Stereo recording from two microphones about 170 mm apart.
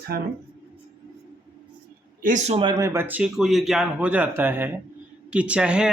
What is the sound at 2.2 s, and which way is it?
Speech, 50° right (ahead or behind).